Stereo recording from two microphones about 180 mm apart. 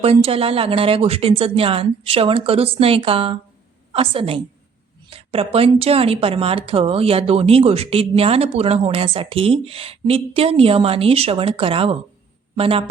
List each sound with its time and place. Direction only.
0.0 s a man's voice: 35° right (ahead or behind)